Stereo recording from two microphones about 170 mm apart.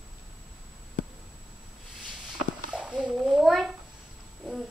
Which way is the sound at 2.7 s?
5° right (ahead or behind).